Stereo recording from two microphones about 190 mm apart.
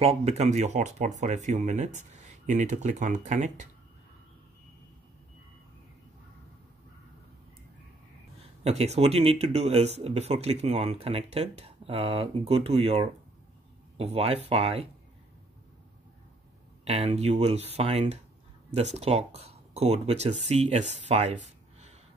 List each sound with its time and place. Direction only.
0.0 s speech: 35° right (ahead or behind)
8.6 s speech: 35° right (ahead or behind)
16.8 s speech: 35° right (ahead or behind)